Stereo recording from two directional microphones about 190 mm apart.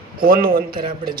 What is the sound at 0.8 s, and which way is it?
Speech, 25° right (ahead or behind).